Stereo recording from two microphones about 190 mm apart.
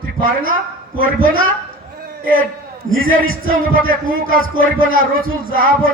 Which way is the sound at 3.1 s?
50° right (ahead or behind).